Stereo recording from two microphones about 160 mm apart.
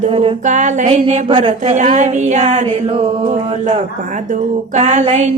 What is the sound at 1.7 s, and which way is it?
Speech, 50° right (ahead or behind).